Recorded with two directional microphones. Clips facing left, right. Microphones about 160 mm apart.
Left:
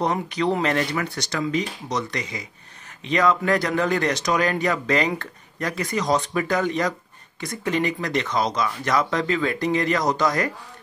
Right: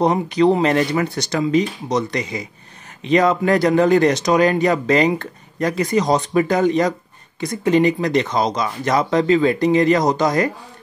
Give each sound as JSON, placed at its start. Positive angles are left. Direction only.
{"t": 0.3, "sound": "speech", "side_deg": -35}
{"t": 1.5, "sound": "speech", "side_deg": -40}
{"t": 3.1, "sound": "speech", "side_deg": -30}
{"t": 7.7, "sound": "speech", "side_deg": -35}
{"t": 8.5, "sound": "speech", "side_deg": -25}